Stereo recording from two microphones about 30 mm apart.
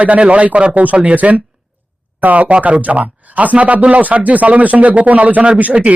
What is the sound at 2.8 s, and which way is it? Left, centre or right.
Speech, right.